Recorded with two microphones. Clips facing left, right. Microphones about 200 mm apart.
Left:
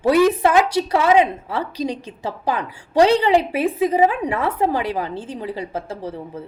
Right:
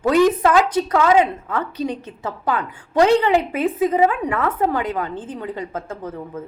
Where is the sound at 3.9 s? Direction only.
25° left (ahead or behind).